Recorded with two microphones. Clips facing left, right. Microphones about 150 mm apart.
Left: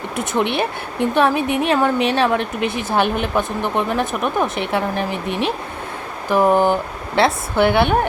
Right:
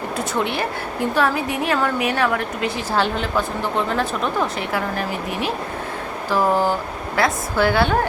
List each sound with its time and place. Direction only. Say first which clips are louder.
0.3 s a woman's voice: left 5 dB; 20° left (ahead or behind)